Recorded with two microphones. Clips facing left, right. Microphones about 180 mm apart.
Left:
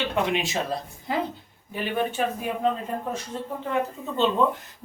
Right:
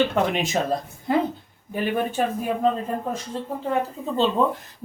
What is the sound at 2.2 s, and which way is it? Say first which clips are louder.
Speech: right 3 dB; 40° right (ahead or behind).